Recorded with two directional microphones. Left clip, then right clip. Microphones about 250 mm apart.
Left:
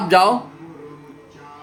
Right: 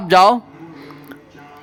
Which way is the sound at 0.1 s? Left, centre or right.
Right.